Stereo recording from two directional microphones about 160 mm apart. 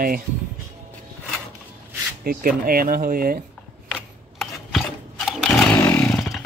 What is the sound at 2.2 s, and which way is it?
Speech, 65° right (ahead or behind).